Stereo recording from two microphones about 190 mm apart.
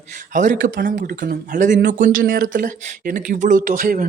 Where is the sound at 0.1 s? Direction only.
40° right (ahead or behind).